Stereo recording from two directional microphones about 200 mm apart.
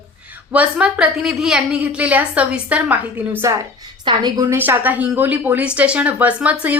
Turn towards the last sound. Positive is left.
turn(degrees=-5)  # may be behind; listen again after turning